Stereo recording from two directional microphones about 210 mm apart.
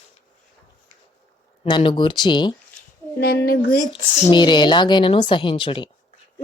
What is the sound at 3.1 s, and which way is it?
Speech, 50° left (ahead or behind).